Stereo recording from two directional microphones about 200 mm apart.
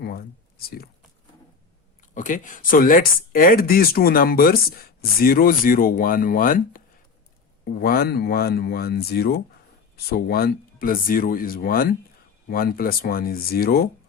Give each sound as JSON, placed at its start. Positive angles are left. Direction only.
{"t": 0.0, "sound": "speech", "side_deg": 50}
{"t": 2.1, "sound": "speech", "side_deg": 40}